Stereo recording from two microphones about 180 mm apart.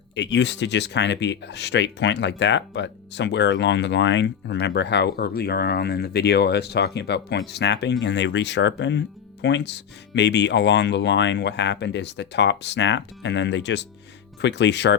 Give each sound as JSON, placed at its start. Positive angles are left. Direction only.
{"t": 0.1, "sound": "speech", "side_deg": 80}